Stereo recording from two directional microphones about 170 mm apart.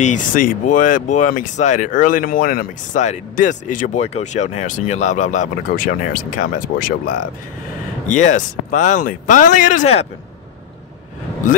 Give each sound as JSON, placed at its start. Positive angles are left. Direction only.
{"t": 0.0, "sound": "speech", "side_deg": 50}
{"t": 8.1, "sound": "speech", "side_deg": 45}